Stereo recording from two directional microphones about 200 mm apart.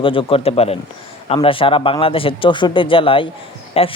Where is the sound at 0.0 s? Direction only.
25° left (ahead or behind).